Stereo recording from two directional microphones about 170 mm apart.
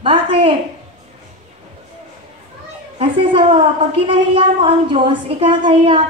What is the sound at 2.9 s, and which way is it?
A woman's voice, 30° right (ahead or behind).